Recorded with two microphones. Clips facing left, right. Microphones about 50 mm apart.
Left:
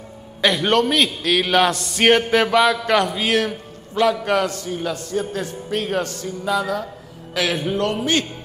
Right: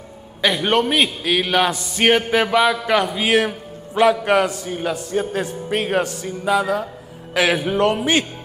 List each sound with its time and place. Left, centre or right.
0.4 s a man's voice: centre